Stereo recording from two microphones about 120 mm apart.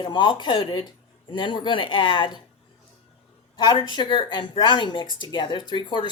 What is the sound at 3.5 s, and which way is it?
Speech, 35° left (ahead or behind).